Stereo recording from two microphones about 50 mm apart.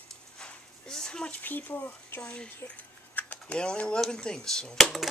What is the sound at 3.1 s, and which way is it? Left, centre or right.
Typing, left.